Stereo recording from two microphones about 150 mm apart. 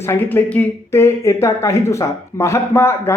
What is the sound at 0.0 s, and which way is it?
Speech, 15° left (ahead or behind).